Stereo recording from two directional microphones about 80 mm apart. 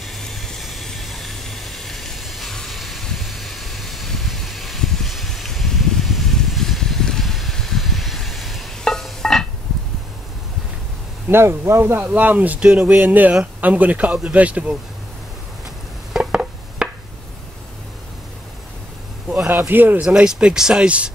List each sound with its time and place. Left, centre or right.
0.0 s steam: centre
11.2 s speech: right; by 14.8 s centre
16.1 s a sound: centre
19.2 s a sound: centre
19.7 s speech: right
20.0 s speech: centre